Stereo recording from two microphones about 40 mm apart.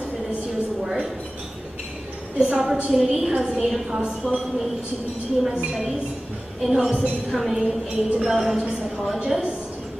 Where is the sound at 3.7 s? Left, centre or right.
Centre.